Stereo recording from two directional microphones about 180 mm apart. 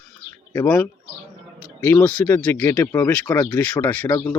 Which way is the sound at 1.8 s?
10° left (ahead or behind).